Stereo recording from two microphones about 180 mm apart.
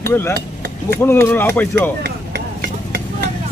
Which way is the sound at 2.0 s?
60° right (ahead or behind).